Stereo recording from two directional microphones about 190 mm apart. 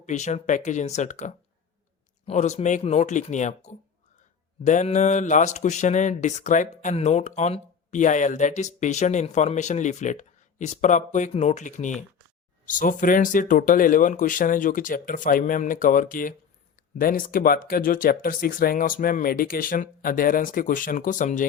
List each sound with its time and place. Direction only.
0.0 s speech: 40° left (ahead or behind)